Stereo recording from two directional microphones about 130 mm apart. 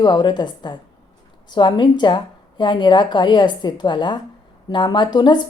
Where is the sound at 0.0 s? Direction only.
35° left (ahead or behind).